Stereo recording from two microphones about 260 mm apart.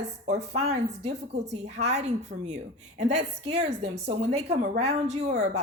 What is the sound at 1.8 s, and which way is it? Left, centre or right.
Speech, right.